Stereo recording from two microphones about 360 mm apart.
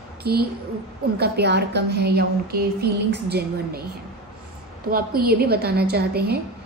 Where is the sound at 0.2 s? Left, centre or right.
Right.